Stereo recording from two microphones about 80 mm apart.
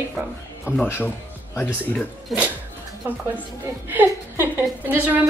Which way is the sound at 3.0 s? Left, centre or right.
Right.